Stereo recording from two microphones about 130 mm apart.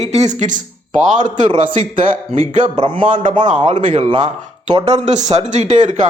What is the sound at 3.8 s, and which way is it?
Speech, 60° right (ahead or behind).